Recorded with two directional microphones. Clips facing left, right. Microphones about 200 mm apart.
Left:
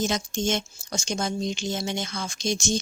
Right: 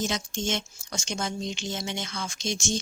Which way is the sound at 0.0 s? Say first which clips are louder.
Left 4 dB; 40° left (ahead or behind).